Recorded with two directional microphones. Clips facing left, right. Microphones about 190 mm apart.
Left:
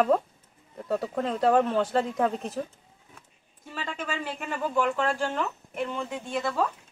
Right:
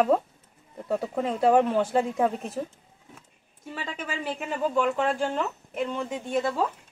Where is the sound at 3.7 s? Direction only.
15° right (ahead or behind).